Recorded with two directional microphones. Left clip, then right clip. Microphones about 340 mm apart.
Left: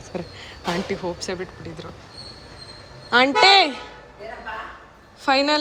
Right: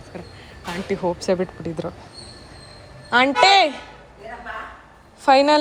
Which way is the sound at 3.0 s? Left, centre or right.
Centre.